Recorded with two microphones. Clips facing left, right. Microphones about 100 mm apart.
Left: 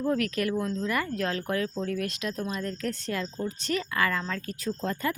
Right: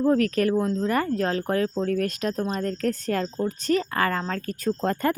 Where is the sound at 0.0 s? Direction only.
35° right (ahead or behind).